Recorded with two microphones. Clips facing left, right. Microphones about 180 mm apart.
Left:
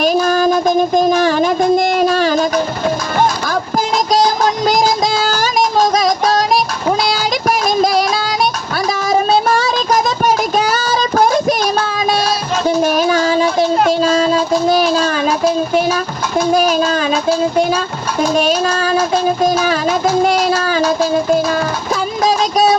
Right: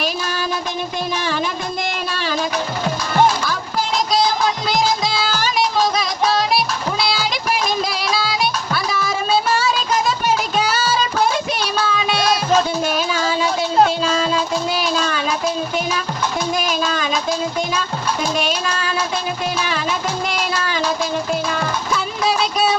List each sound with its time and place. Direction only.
0.0 s music: 45° left (ahead or behind)
8.7 s child singing: 45° left (ahead or behind)
16.5 s music: 40° left (ahead or behind)
21.9 s a sound: 40° left (ahead or behind)